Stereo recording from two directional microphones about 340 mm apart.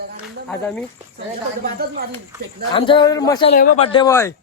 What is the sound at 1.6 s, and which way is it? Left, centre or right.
Speech, right.